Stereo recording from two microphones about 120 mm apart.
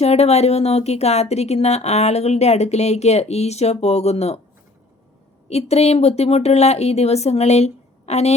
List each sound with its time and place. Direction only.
0.0 s speech: 60° left (ahead or behind)
5.5 s speech: 60° left (ahead or behind)